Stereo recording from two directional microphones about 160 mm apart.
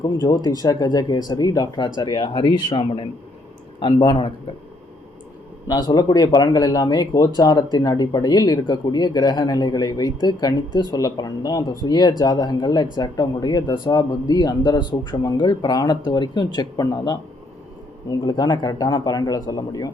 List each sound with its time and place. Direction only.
0.0 s speech: 25° left (ahead or behind)
5.6 s speech: 25° left (ahead or behind)
18.3 s speech: 25° left (ahead or behind)